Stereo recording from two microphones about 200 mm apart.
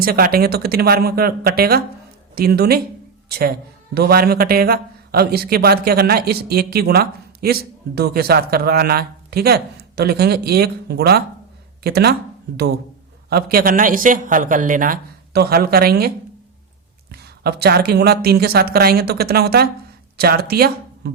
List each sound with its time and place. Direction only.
0.0 s a man's voice: 45° right (ahead or behind)